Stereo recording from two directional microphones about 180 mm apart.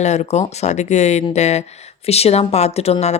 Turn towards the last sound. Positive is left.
turn(degrees=35)  # may be behind; listen again after turning